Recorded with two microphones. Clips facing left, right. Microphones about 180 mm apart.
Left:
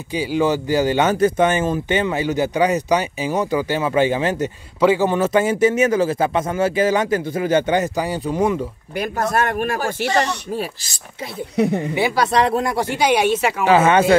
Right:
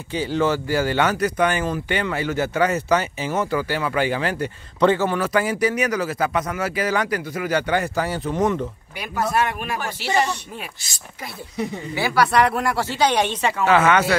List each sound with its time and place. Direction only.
0.1 s speech: 10° left (ahead or behind)
8.9 s speech: 45° left (ahead or behind)
11.5 s speech: 65° left (ahead or behind)
11.9 s speech: 20° left (ahead or behind)
12.9 s a woman's voice: 10° left (ahead or behind)
13.7 s speech: 25° left (ahead or behind)